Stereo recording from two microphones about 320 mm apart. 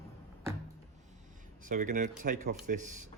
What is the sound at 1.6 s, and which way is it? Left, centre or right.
Speech, right.